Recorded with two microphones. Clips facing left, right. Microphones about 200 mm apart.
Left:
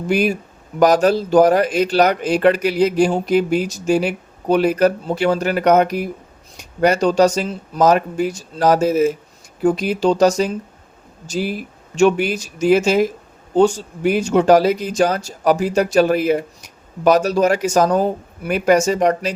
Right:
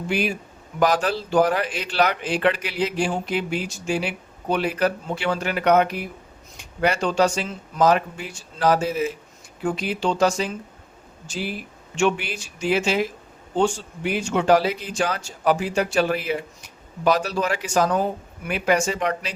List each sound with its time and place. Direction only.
0.1 s speech: 40° left (ahead or behind)